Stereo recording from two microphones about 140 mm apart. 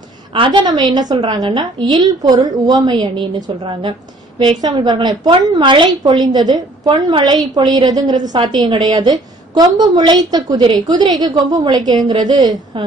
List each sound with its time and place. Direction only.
0.3 s a woman's voice: 35° right (ahead or behind)
6.9 s a woman's voice: 40° right (ahead or behind)